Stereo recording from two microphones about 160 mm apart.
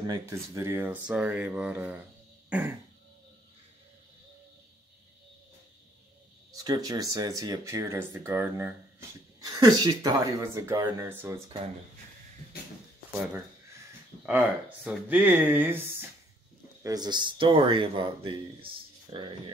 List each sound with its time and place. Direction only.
0.0 s speech: 20° right (ahead or behind)
6.5 s speech: 25° right (ahead or behind)
9.4 s speech: 25° right (ahead or behind)
14.2 s speech: 10° right (ahead or behind)
16.8 s speech: 25° right (ahead or behind)